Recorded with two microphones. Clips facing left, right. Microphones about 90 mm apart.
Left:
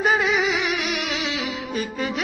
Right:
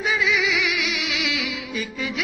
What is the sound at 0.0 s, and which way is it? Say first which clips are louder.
Music: left 3 dB; 45° left (ahead or behind).